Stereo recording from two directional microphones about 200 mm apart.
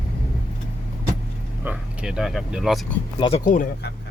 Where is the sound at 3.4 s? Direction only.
40° left (ahead or behind).